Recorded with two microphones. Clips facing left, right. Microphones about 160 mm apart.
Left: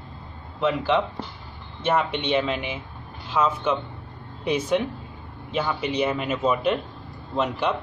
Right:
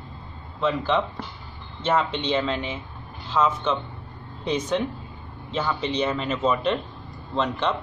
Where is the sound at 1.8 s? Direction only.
15° left (ahead or behind).